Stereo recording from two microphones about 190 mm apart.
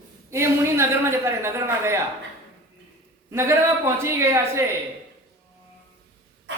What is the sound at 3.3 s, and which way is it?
A woman's voice, 15° right (ahead or behind).